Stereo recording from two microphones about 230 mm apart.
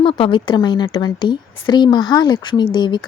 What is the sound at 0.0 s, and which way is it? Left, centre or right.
A woman's voice, left.